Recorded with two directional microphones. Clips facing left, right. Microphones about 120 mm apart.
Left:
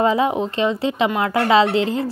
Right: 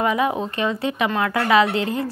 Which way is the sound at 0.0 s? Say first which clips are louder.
Left 3 dB; 30° left (ahead or behind).